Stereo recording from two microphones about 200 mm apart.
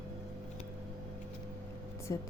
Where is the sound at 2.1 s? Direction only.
20° left (ahead or behind).